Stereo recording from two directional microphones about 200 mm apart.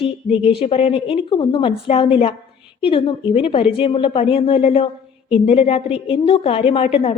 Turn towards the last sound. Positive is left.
turn(degrees=30)  # may be behind; listen again after turning